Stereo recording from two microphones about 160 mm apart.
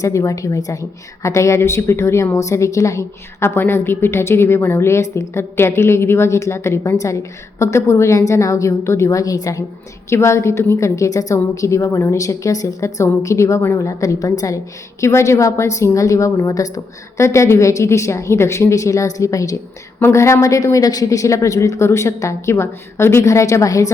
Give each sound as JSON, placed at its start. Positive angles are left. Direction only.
{"t": 0.0, "sound": "a woman's voice", "side_deg": 20}